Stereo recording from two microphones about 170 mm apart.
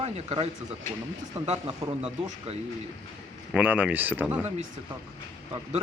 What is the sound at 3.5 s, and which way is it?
Speech, 10° right (ahead or behind).